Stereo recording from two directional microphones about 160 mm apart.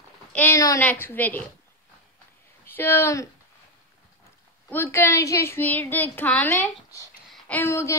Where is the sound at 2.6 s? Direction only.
15° left (ahead or behind).